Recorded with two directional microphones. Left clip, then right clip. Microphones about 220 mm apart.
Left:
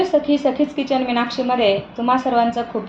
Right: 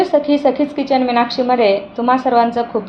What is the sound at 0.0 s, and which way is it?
A woman's voice, 30° right (ahead or behind).